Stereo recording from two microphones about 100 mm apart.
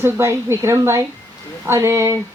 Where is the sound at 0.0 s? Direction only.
25° right (ahead or behind).